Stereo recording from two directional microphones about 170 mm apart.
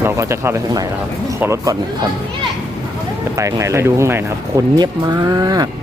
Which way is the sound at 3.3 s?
15° right (ahead or behind).